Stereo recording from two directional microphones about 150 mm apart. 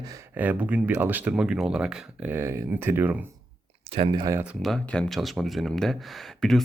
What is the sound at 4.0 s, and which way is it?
Speech, 30° right (ahead or behind).